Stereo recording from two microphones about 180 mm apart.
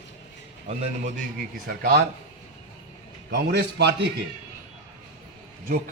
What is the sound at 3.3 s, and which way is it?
Speech, 70° right (ahead or behind).